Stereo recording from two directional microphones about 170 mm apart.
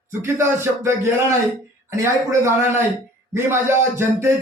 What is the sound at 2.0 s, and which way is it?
Speech, 15° right (ahead or behind).